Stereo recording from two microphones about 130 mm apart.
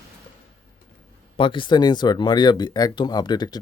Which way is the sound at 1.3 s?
40° left (ahead or behind).